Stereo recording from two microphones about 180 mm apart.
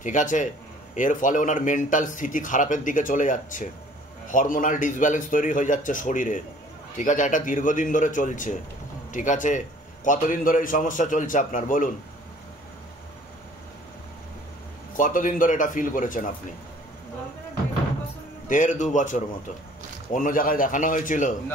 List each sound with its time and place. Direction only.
0.0 s a man's voice: 45° left (ahead or behind)
15.0 s a man's voice: 50° left (ahead or behind)
18.5 s a man's voice: 45° left (ahead or behind)